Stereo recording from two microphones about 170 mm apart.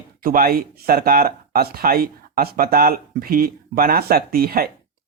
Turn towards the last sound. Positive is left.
turn(degrees=-60)  # may be behind; listen again after turning